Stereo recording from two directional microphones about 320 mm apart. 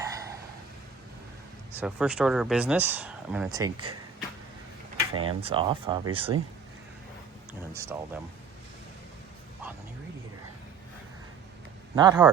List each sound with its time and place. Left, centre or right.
0.0 s a sound: centre
1.8 s speech: centre
5.1 s speech: centre
7.7 s speech: centre
11.9 s speech: centre